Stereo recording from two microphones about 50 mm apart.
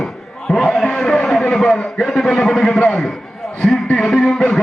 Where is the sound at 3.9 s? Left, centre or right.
Centre.